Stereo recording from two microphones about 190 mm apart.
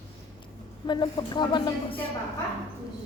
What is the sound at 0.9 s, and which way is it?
Music, 25° left (ahead or behind).